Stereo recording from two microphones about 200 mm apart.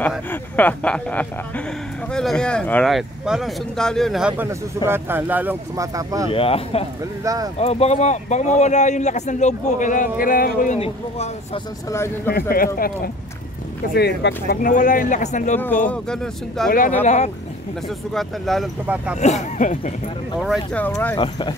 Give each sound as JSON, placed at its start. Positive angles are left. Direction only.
{"t": 0.3, "sound": "speech", "side_deg": 10}
{"t": 6.3, "sound": "speech", "side_deg": 30}
{"t": 7.2, "sound": "speech", "side_deg": -20}
{"t": 7.5, "sound": "a man's voice", "side_deg": 30}
{"t": 10.8, "sound": "speech", "side_deg": 30}
{"t": 12.3, "sound": "speech", "side_deg": 50}
{"t": 15.6, "sound": "speech", "side_deg": 10}
{"t": 17.0, "sound": "a man's voice", "side_deg": 35}
{"t": 17.8, "sound": "speech", "side_deg": 0}
{"t": 19.1, "sound": "a man's voice", "side_deg": 35}
{"t": 20.3, "sound": "speech", "side_deg": 0}
{"t": 20.8, "sound": "speech", "side_deg": 10}
{"t": 21.2, "sound": "speech", "side_deg": 25}